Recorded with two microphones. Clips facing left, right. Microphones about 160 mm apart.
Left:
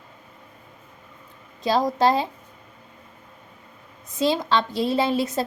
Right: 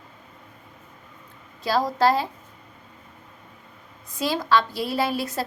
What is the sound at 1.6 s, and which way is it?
Speech, 20° left (ahead or behind).